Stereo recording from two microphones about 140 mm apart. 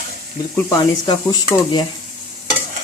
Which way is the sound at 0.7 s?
30° left (ahead or behind).